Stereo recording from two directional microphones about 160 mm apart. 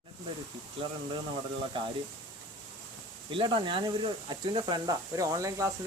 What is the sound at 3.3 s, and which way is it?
Speech, 30° right (ahead or behind).